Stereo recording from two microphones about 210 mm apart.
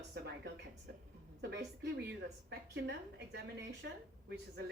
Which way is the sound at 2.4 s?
55° right (ahead or behind).